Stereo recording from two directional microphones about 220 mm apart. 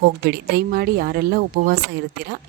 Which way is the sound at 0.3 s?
45° right (ahead or behind).